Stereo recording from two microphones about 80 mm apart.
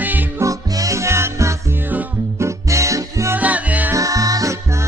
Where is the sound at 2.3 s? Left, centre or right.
Right.